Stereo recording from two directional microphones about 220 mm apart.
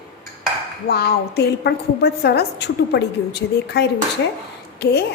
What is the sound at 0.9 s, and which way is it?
A woman's voice, 45° left (ahead or behind).